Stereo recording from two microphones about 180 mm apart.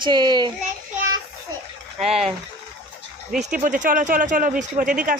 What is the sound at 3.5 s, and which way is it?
Speech, 45° right (ahead or behind).